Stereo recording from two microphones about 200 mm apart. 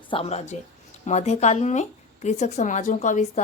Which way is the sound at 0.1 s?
30° left (ahead or behind).